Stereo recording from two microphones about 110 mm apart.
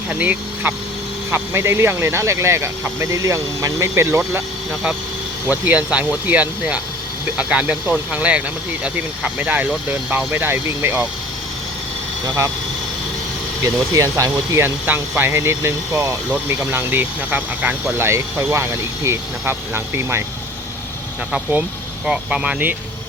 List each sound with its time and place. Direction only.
0.1 s speech: 15° right (ahead or behind)
5.5 s speech: 15° right (ahead or behind)
13.9 s speech: 30° right (ahead or behind)
22.0 s speech: 10° right (ahead or behind)